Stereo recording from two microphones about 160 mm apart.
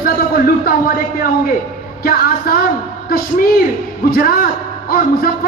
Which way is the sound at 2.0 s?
65° left (ahead or behind).